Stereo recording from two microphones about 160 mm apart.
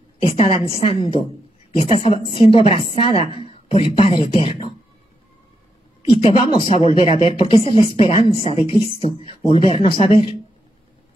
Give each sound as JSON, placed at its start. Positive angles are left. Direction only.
{"t": 0.2, "sound": "a woman's voice", "side_deg": 35}
{"t": 6.0, "sound": "speech", "side_deg": 35}